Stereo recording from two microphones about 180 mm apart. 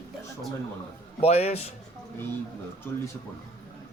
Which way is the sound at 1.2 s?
35° left (ahead or behind).